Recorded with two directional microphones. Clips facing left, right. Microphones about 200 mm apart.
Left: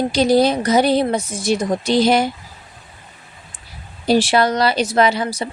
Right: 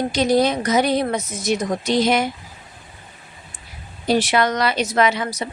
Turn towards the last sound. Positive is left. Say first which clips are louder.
# left 3 dB
turn(degrees=30)  # may be behind; listen again after turning